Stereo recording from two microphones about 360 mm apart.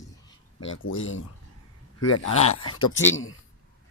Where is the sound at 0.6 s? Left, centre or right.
Left.